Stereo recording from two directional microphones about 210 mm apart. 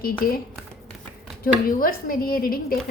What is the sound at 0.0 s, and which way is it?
Speech, 45° left (ahead or behind).